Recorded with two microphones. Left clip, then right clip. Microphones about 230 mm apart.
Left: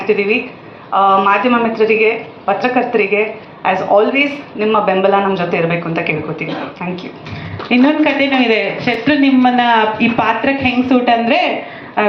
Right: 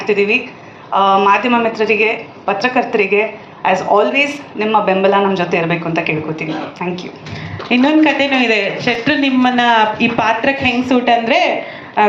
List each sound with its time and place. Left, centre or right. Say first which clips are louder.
0.0 s a man's voice: even; right
7.7 s a man's voice: right 1 dB; right